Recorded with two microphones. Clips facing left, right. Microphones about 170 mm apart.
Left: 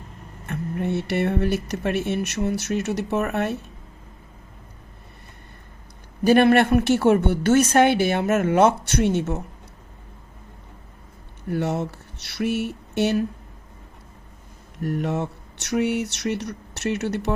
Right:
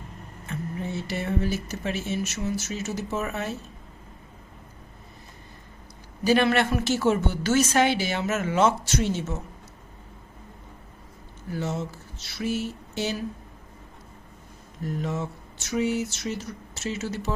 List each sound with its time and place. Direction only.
0.4 s a woman's voice: 60° left (ahead or behind)
6.2 s a woman's voice: 55° left (ahead or behind)
11.4 s speech: 60° left (ahead or behind)
14.8 s a woman's voice: 65° left (ahead or behind)